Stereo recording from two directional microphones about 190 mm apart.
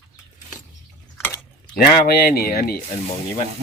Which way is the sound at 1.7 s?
55° left (ahead or behind).